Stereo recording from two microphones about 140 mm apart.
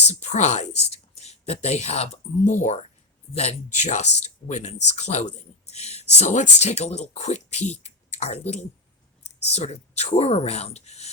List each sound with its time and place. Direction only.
0.1 s speech: 55° left (ahead or behind)